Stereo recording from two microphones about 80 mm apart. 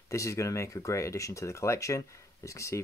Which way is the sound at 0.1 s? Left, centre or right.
Left.